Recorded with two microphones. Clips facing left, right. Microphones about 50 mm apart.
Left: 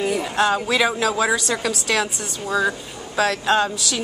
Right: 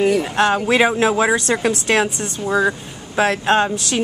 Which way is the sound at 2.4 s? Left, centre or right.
Right.